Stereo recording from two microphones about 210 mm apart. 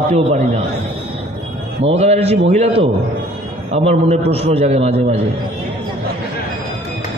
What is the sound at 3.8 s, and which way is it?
A man's voice, 30° right (ahead or behind).